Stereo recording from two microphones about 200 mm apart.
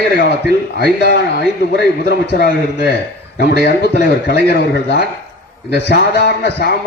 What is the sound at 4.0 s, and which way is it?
A man's voice, 55° left (ahead or behind).